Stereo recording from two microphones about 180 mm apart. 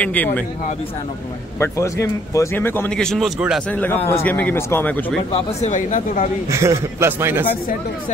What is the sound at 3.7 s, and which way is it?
Speech, 10° left (ahead or behind).